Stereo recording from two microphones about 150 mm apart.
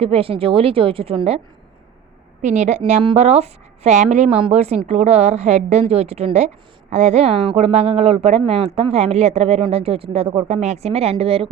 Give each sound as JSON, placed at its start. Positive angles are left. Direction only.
{"t": 0.0, "sound": "a woman's voice", "side_deg": -40}
{"t": 2.4, "sound": "speech", "side_deg": -50}